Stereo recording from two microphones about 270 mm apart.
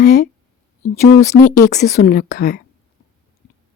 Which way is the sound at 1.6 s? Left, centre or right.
Left.